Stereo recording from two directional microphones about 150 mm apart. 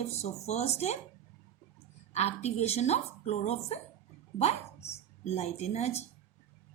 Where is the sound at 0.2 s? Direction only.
45° left (ahead or behind).